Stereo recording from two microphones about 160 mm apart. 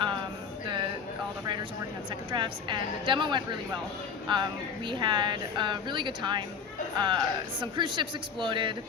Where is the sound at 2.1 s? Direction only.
30° right (ahead or behind).